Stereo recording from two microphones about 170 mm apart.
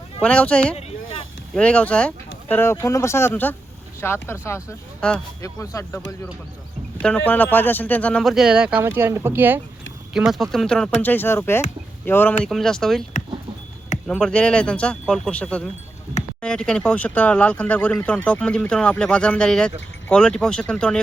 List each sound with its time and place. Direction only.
0.2 s speech: 5° left (ahead or behind)
5.4 s speech: 20° left (ahead or behind)
7.0 s speech: 5° left (ahead or behind); by 9.6 s 10° right (ahead or behind)
10.2 s speech: centre (ahead or behind)
12.4 s speech: centre (ahead or behind)
14.1 s speech: 5° left (ahead or behind)